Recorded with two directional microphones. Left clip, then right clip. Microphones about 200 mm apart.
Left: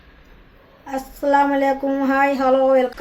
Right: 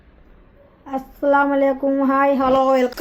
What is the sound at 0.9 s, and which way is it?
Speech, 40° right (ahead or behind).